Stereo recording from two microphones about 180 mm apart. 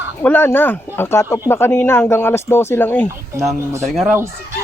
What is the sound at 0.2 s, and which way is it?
Speech, 10° left (ahead or behind).